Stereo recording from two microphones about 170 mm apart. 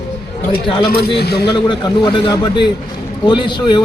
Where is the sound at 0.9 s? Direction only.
70° left (ahead or behind).